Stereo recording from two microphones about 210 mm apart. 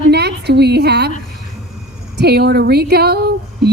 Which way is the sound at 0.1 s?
50° right (ahead or behind).